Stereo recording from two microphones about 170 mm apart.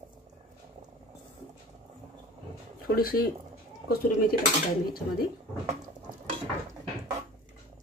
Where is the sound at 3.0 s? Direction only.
60° left (ahead or behind).